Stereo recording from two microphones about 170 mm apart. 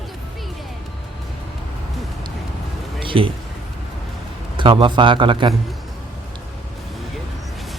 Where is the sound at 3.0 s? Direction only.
30° right (ahead or behind).